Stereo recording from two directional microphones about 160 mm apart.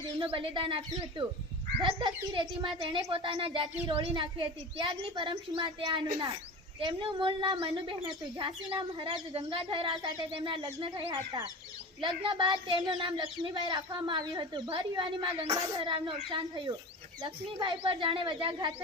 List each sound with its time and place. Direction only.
0.2 s speech: 35° right (ahead or behind)
1.8 s speech: 30° right (ahead or behind)
17.2 s speech: 30° right (ahead or behind)